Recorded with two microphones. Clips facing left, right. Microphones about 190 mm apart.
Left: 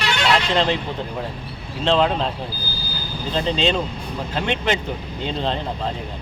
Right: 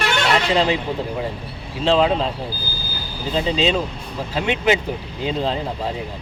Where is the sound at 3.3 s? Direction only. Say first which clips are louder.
Right 1 dB; 5° right (ahead or behind).